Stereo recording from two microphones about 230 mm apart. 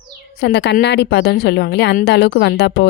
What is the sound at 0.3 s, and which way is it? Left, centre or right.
A woman's voice, left.